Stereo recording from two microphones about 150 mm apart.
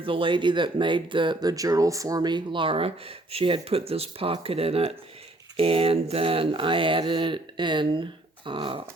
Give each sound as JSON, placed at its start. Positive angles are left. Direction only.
{"t": 0.0, "sound": "speech", "side_deg": -35}